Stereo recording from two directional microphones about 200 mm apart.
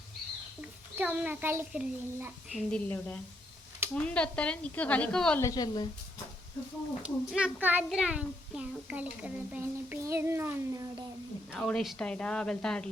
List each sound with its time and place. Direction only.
0.6 s a child's voice: 5° right (ahead or behind)
5.4 s a woman's voice: 15° left (ahead or behind)
7.0 s a child's voice: 5° right (ahead or behind)
11.5 s a child's voice: centre (ahead or behind)